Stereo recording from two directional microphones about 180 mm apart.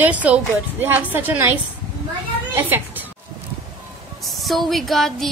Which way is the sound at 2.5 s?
10° right (ahead or behind).